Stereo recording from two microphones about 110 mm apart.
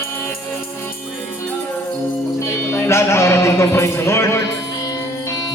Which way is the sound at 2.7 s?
20° left (ahead or behind).